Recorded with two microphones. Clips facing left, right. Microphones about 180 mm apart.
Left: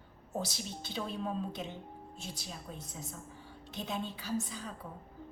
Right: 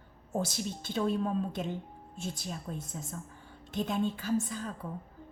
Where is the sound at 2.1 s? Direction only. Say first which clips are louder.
Right 9 dB; 50° right (ahead or behind).